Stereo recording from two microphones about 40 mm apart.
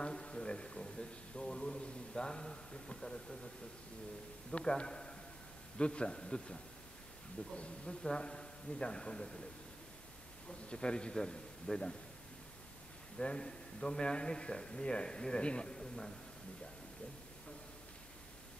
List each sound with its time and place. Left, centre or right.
0.0 s a man's voice: left
4.5 s speech: left
10.7 s speech: left
13.2 s speech: left